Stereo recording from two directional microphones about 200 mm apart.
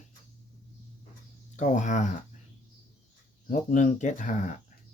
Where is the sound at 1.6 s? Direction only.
40° left (ahead or behind).